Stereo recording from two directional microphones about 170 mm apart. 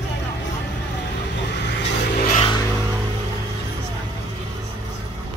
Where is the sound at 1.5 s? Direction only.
85° left.